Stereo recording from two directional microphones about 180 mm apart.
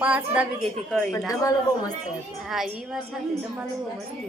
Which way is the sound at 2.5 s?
Centre (ahead or behind).